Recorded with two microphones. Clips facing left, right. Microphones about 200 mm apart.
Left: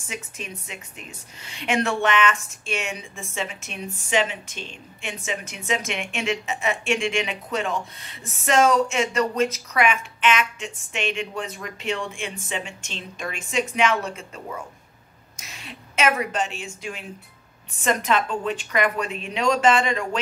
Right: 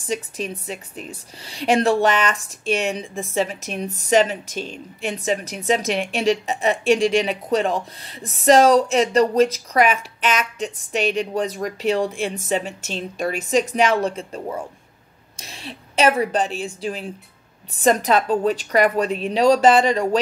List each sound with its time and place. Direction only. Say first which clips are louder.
0.0 s a woman's voice: right 10 dB; 35° right (ahead or behind)